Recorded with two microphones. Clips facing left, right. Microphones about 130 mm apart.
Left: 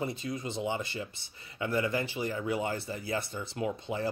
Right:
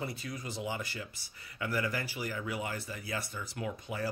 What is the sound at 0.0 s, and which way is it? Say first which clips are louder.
Speech: left 5 dB; 25° left (ahead or behind).